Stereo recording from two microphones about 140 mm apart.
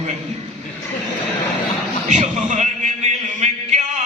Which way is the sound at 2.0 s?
60° right (ahead or behind).